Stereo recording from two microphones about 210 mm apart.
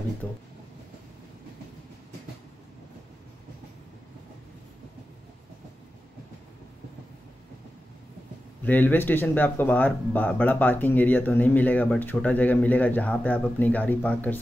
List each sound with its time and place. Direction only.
0.2 s speech: 5° left (ahead or behind)
8.6 s speech: 10° left (ahead or behind)